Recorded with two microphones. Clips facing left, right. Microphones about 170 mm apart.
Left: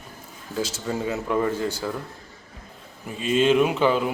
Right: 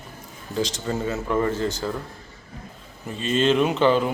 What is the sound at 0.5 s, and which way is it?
A man's voice, 5° left (ahead or behind).